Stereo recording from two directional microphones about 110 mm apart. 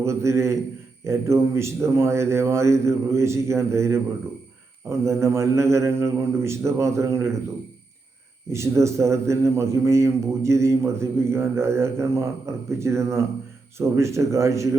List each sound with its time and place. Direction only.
0.0 s a man's voice: 25° right (ahead or behind)
8.5 s a man's voice: 25° right (ahead or behind)